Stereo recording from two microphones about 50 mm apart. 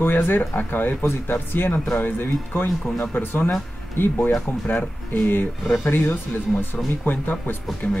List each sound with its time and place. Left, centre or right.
0.0 s speech: left